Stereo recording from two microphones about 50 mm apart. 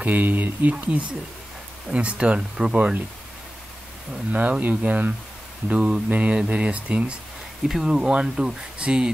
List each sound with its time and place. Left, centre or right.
0.0 s speech: right
4.3 s speech: right
5.7 s speech: right
7.6 s speech: centre